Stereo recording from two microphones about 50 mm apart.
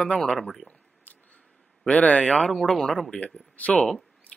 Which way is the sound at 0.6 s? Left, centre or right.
Left.